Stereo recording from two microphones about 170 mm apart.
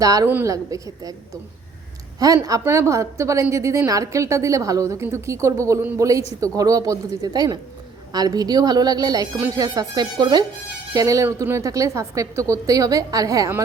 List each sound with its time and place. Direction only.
0.0 s a woman's voice: 20° right (ahead or behind)